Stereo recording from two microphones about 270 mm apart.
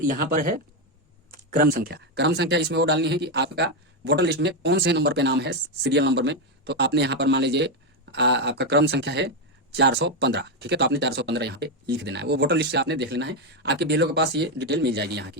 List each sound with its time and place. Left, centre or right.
0.0 s speech: right